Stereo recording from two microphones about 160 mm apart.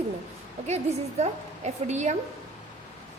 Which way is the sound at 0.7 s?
45° right (ahead or behind).